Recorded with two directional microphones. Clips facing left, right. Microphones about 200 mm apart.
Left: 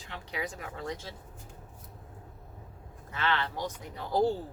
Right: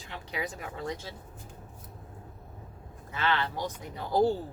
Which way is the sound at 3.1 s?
5° right (ahead or behind).